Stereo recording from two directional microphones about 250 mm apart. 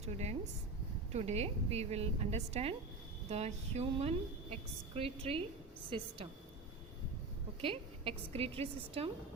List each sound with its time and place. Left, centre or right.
0.0 s a woman's voice: right
7.6 s a woman's voice: right